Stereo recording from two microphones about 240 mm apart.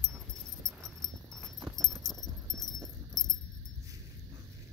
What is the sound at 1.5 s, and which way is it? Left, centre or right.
Keys jangling, centre.